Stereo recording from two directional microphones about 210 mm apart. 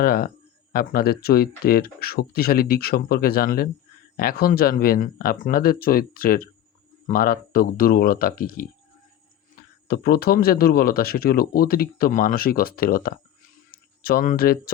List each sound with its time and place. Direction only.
0.0 s speech: 45° left (ahead or behind)
9.9 s speech: 45° left (ahead or behind)